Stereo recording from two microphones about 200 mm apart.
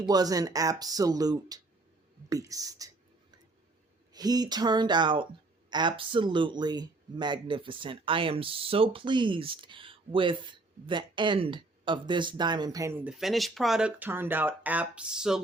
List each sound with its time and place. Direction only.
0.1 s speech: 20° right (ahead or behind)
4.1 s speech: 20° right (ahead or behind); by 15.4 s 5° right (ahead or behind)